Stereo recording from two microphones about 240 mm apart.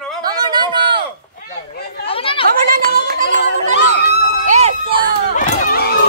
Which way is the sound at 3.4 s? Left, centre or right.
Left.